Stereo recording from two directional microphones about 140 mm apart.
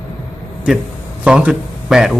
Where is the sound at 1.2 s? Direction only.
5° right (ahead or behind).